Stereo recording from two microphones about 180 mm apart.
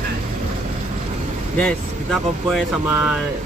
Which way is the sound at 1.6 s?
Centre (ahead or behind).